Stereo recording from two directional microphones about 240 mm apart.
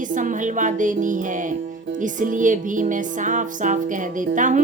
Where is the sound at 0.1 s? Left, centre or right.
Right.